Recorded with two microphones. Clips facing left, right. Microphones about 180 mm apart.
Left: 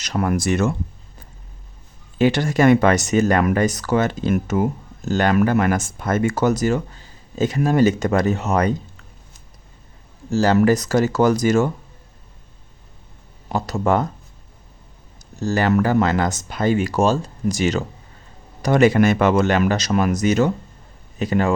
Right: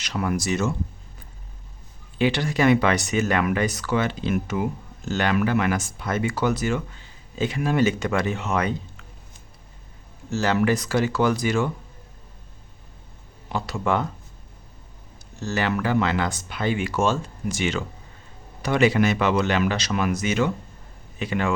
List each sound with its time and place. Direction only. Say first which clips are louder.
0.0 s speech: left 5 dB; 50° left (ahead or behind)
2.1 s speech: left 5 dB; 45° left (ahead or behind)
10.2 s speech: left 6 dB; 35° left (ahead or behind)
13.5 s speech: left 5 dB; 40° left (ahead or behind)
15.4 s speech: left 7 dB; 40° left (ahead or behind)